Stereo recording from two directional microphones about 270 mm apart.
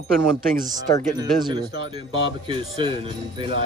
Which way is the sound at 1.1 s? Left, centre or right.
Centre.